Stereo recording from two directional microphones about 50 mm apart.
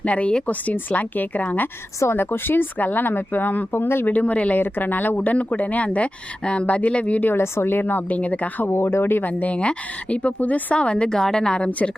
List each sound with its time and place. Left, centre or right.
0.0 s a woman's voice: left
2.1 s speech: left
4.1 s speech: left
7.3 s speech: left
8.1 s a woman's voice: left
8.6 s speech: left
9.2 s speech: left
10.8 s a woman's voice: left